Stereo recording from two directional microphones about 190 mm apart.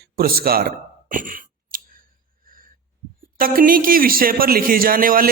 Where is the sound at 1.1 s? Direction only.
45° right (ahead or behind).